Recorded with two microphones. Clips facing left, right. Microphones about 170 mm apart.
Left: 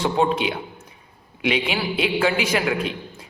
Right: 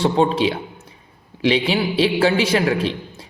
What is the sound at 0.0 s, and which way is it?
A man's voice, 30° right (ahead or behind).